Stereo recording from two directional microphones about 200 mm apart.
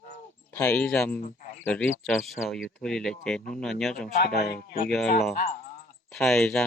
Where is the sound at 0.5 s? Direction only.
10° left (ahead or behind).